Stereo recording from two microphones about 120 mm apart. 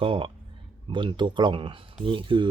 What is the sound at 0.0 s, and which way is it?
Speech, 45° right (ahead or behind).